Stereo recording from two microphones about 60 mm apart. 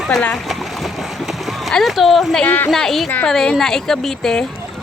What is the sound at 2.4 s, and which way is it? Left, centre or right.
Speech, left.